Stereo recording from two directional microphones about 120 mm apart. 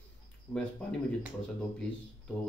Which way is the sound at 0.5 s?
10° left (ahead or behind).